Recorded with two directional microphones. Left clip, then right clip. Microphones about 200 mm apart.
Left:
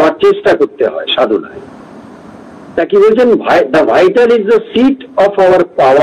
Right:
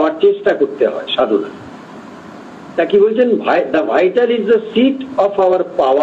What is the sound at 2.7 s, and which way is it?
A man's voice, 60° left (ahead or behind).